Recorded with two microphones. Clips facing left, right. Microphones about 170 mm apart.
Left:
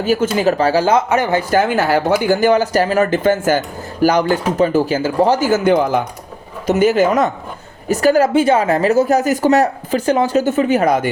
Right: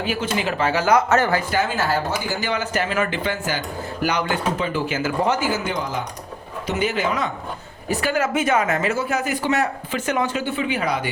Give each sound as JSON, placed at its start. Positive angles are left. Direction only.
{"t": 0.0, "sound": "a woman's voice", "side_deg": 40}
{"t": 1.1, "sound": "speech", "side_deg": 15}
{"t": 1.4, "sound": "a woman's voice", "side_deg": 45}
{"t": 5.6, "sound": "speech", "side_deg": 55}
{"t": 6.7, "sound": "a woman's voice", "side_deg": 45}